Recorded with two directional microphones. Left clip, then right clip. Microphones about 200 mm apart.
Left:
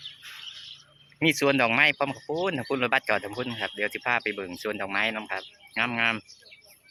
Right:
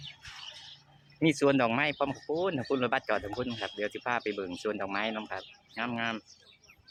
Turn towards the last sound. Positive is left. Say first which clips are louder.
# left 8 dB
turn(degrees=5)  # may be behind; listen again after turning